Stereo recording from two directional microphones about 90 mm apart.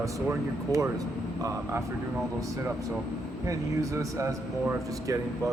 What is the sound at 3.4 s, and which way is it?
Speech, 35° right (ahead or behind).